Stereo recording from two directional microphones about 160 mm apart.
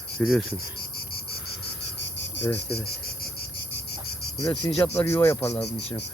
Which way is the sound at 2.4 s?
15° left (ahead or behind).